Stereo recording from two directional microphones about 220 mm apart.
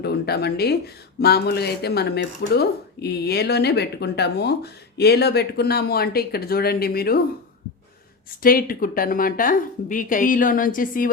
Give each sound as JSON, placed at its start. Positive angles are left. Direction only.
{"t": 0.0, "sound": "speech", "side_deg": 45}
{"t": 8.4, "sound": "a woman's voice", "side_deg": 40}